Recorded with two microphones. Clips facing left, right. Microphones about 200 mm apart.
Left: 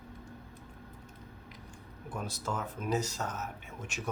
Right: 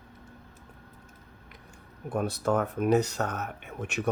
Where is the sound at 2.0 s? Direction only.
60° right (ahead or behind).